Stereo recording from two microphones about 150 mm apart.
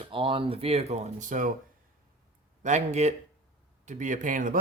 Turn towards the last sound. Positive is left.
turn(degrees=-60)  # may be behind; listen again after turning